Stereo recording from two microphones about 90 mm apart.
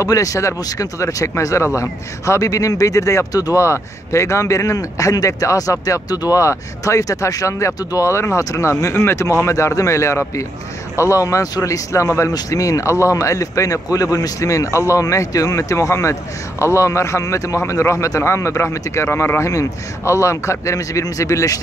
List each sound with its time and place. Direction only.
0.0 s speech: 40° left (ahead or behind)